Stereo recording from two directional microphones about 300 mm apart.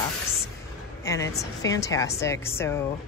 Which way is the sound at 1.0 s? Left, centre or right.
Centre.